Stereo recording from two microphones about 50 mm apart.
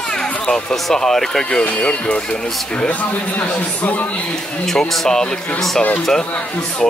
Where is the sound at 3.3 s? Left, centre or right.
Left.